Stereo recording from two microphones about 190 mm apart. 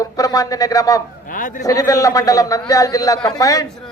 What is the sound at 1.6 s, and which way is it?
A man's voice, 20° left (ahead or behind).